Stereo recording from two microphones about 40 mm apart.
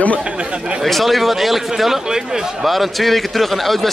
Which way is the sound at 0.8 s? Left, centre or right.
Centre.